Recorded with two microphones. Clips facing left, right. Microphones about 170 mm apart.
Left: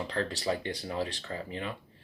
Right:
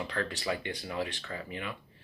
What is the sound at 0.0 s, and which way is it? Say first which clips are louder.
A man's voice: left 2 dB; 30° left (ahead or behind).